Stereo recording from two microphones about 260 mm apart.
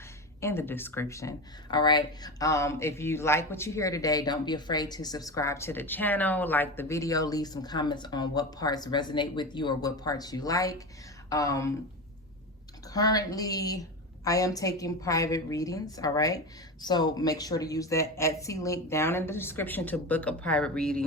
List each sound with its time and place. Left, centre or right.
0.4 s speech: centre
12.9 s speech: centre